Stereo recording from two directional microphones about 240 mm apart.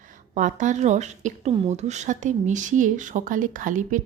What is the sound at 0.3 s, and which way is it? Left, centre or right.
Speech, right.